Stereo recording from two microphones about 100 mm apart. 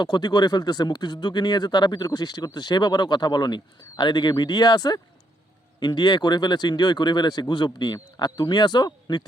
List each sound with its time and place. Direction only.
0.0 s speech: 45° left (ahead or behind)